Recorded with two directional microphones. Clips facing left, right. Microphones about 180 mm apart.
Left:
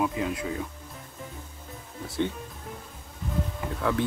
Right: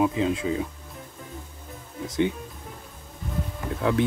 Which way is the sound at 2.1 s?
15° right (ahead or behind).